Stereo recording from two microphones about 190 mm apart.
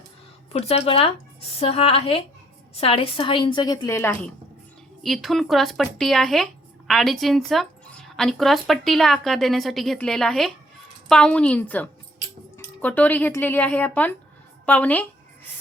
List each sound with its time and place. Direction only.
0.5 s a woman's voice: 35° left (ahead or behind); by 15.0 s 10° left (ahead or behind)